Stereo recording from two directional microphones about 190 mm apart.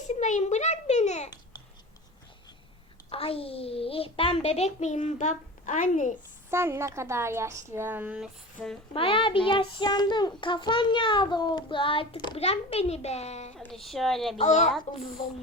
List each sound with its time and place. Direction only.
0.1 s a child's voice: 40° left (ahead or behind)
3.1 s a child's voice: 30° left (ahead or behind)
6.5 s a woman's voice: 15° right (ahead or behind); by 8.8 s 5° left (ahead or behind)
8.9 s child singing: 25° left (ahead or behind)
13.6 s a woman's voice: centre (ahead or behind)
14.3 s a child's voice: 35° left (ahead or behind)